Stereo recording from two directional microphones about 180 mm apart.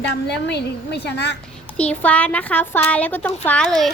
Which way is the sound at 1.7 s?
5° left (ahead or behind).